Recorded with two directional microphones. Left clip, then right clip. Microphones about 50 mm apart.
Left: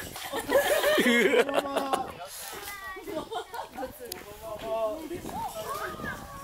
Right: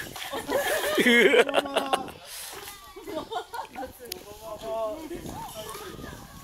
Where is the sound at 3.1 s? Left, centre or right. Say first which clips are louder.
Right 3 dB; centre.